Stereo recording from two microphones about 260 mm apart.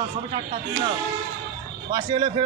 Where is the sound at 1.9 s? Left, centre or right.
Centre.